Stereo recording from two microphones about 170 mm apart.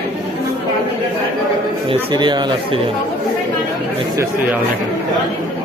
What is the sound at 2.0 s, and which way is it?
Speech, 25° right (ahead or behind).